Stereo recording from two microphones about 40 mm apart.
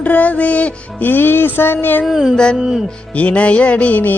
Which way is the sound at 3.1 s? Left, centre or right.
Left.